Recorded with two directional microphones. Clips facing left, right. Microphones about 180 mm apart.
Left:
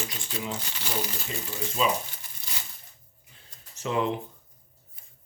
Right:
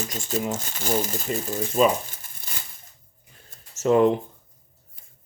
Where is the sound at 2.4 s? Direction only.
50° right (ahead or behind).